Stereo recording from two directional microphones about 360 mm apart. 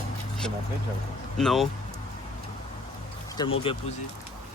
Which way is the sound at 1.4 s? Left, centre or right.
Centre.